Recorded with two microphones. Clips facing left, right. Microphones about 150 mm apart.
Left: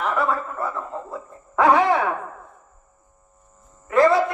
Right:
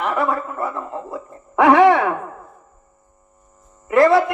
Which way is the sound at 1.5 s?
75° right (ahead or behind).